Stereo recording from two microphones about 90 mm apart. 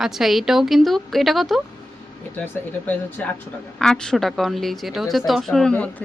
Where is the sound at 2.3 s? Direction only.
20° left (ahead or behind).